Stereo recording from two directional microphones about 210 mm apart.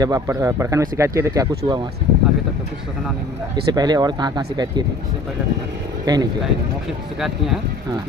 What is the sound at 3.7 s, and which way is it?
Speech, 20° right (ahead or behind).